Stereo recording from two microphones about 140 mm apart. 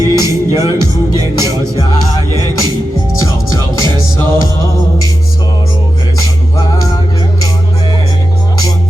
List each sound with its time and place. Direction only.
0.0 s music: 25° right (ahead or behind)